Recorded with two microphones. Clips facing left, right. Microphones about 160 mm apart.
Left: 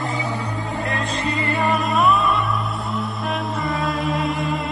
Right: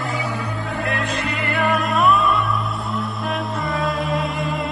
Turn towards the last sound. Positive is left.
turn(degrees=0)  # may be behind; listen again after turning